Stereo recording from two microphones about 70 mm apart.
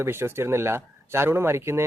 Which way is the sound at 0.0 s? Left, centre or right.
Right.